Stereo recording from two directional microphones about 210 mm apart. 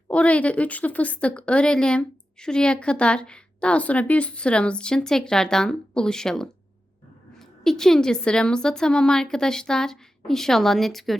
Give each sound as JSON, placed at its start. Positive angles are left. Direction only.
{"t": 0.1, "sound": "speech", "side_deg": 5}